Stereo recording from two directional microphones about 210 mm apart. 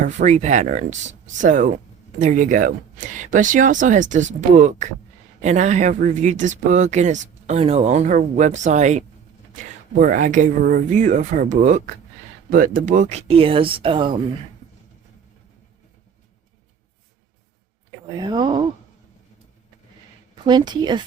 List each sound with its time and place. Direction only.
0.0 s speech: 35° right (ahead or behind)
18.2 s speech: 20° right (ahead or behind)
20.4 s speech: 20° right (ahead or behind)